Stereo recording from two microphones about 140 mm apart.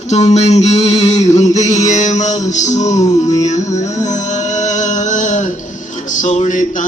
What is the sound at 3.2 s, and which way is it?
Music, 55° left (ahead or behind).